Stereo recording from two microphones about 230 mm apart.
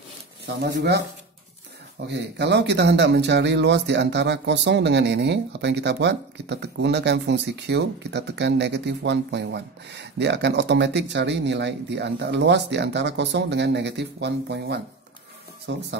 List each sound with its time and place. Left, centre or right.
0.5 s speech: right
2.0 s speech: right